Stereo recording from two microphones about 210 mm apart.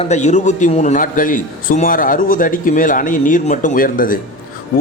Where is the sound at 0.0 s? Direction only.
35° left (ahead or behind).